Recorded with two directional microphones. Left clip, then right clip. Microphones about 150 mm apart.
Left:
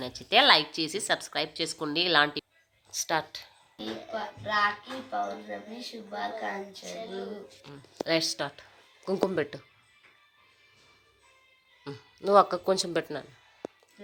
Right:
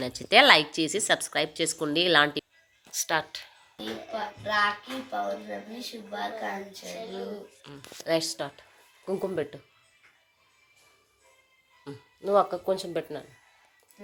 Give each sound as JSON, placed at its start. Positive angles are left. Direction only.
{"t": 0.0, "sound": "music", "side_deg": -10}
{"t": 3.1, "sound": "speech", "side_deg": 5}
{"t": 3.8, "sound": "music", "side_deg": -20}
{"t": 7.6, "sound": "speech", "side_deg": 5}
{"t": 11.9, "sound": "speech", "side_deg": 15}